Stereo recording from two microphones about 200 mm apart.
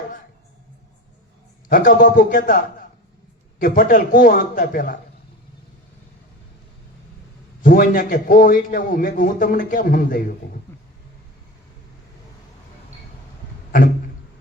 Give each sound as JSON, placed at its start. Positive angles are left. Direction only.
{"t": 1.7, "sound": "a man's voice", "side_deg": 45}
{"t": 3.6, "sound": "a man's voice", "side_deg": 45}
{"t": 7.6, "sound": "a man's voice", "side_deg": 45}